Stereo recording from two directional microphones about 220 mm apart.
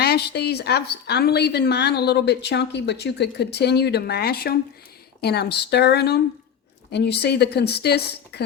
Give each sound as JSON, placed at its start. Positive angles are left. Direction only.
{"t": 0.0, "sound": "a woman's voice", "side_deg": 45}